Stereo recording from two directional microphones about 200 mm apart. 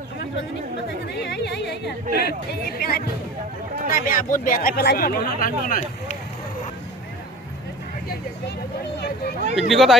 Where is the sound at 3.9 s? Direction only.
45° left (ahead or behind).